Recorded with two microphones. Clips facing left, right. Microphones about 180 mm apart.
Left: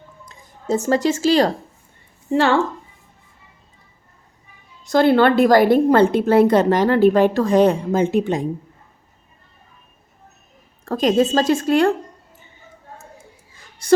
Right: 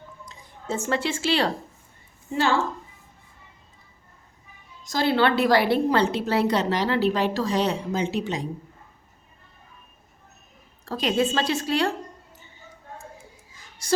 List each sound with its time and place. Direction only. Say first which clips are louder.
0.3 s speech: left 9 dB; 40° left (ahead or behind)
2.3 s a woman's voice: left 6 dB; 60° left (ahead or behind)
4.8 s a woman's voice: left 8 dB; 60° left (ahead or behind)
10.8 s a woman's voice: left 7 dB; 45° left (ahead or behind)